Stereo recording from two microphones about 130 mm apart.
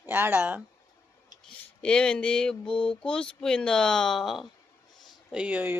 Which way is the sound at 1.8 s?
5° left (ahead or behind).